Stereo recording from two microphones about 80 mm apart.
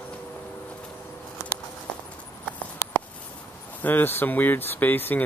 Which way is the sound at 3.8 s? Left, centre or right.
Left.